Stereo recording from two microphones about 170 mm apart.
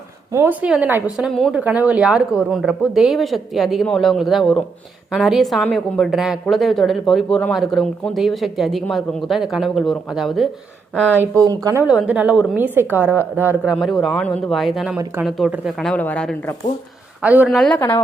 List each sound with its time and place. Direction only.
0.3 s speech: 10° right (ahead or behind)
11.1 s a woman's voice: 10° right (ahead or behind)
12.0 s a woman's voice: 10° right (ahead or behind)
13.7 s speech: centre (ahead or behind)
17.2 s speech: 10° right (ahead or behind)
17.7 s a woman's voice: 15° left (ahead or behind)